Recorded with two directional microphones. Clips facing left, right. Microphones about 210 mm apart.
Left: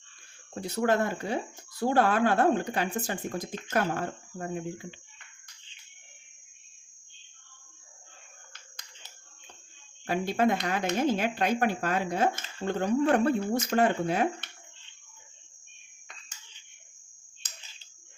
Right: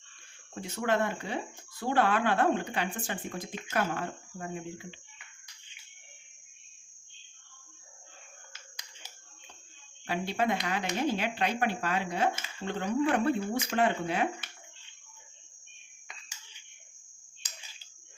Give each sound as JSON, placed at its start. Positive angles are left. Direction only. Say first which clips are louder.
{"t": 0.5, "sound": "speech", "louder": "left 3 dB", "side_deg": 40}
{"t": 10.1, "sound": "speech", "louder": "left 4 dB", "side_deg": 45}